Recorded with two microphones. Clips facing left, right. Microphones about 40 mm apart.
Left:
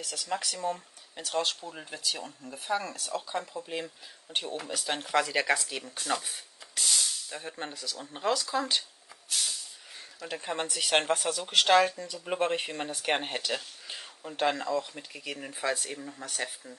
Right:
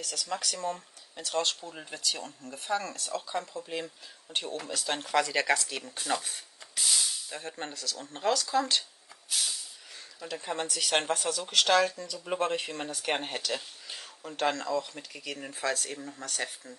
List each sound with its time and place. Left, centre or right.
0.0 s speech: centre
9.3 s hiss: centre
10.3 s speech: centre
13.8 s a sound: centre
14.4 s speech: centre